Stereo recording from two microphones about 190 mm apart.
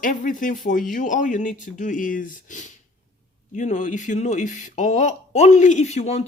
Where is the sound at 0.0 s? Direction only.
45° left (ahead or behind).